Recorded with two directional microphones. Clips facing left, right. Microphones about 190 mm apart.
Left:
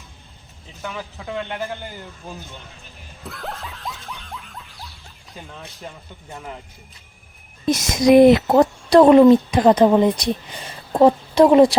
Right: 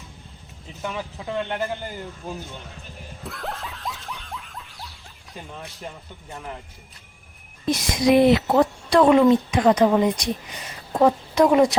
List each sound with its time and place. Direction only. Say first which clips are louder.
0.8 s speech: right 1 dB; 5° right (ahead or behind)
3.2 s snicker: even; centre (ahead or behind)
7.7 s speech: left 4 dB; 45° left (ahead or behind)